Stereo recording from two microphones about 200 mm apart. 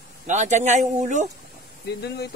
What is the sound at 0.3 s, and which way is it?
Speech, 35° right (ahead or behind).